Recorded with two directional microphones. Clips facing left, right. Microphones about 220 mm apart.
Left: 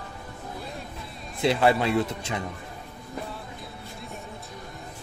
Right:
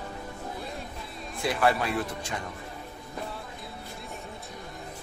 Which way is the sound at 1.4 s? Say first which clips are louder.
Left 4 dB; 25° left (ahead or behind).